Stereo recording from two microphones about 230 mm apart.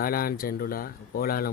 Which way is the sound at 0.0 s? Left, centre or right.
Left.